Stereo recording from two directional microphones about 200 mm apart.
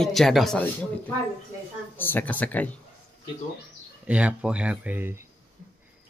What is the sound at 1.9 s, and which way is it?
Speech, 10° left (ahead or behind).